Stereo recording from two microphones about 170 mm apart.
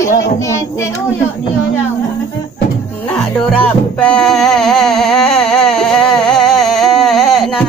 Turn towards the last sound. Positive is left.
turn(degrees=0)  # may be behind; listen again after turning